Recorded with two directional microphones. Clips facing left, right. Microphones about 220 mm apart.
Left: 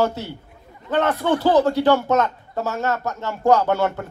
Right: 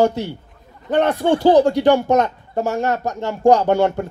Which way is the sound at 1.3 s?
15° right (ahead or behind).